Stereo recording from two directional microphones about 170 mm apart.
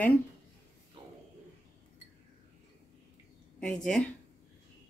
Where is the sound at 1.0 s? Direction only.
30° right (ahead or behind).